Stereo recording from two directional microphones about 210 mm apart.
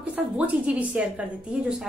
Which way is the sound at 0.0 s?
5° right (ahead or behind).